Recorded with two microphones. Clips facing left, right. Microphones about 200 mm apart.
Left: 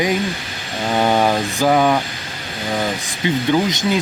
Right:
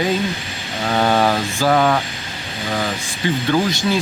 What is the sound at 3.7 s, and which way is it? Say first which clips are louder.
Speech: even; 20° left (ahead or behind).